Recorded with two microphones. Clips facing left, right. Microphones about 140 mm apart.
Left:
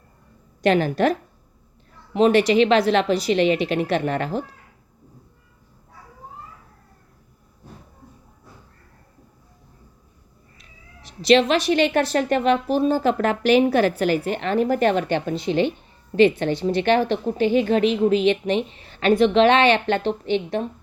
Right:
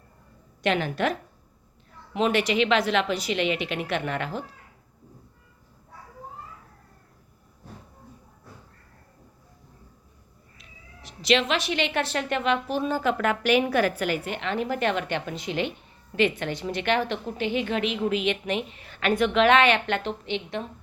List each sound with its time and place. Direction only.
0.6 s speech: 40° left (ahead or behind)
2.1 s speech: 35° left (ahead or behind)
10.6 s speech: 35° left (ahead or behind)